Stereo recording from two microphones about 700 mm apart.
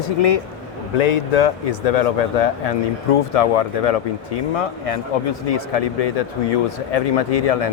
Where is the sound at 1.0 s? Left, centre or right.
Left.